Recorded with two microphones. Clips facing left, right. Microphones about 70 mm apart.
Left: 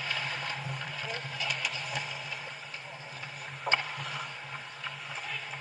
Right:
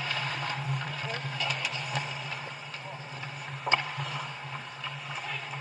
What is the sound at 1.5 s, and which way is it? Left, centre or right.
Vehicle, right.